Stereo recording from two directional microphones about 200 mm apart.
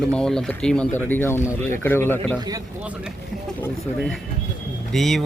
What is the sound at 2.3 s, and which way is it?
Speech, 20° right (ahead or behind).